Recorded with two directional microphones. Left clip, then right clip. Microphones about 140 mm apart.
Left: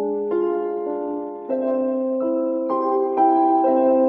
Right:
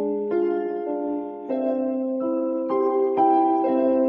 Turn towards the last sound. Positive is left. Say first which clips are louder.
# left 4 dB
turn(degrees=-35)  # may be behind; listen again after turning